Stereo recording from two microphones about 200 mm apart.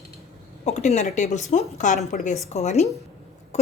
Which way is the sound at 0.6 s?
35° left (ahead or behind).